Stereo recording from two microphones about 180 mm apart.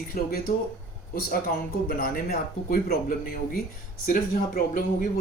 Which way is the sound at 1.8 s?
55° left (ahead or behind).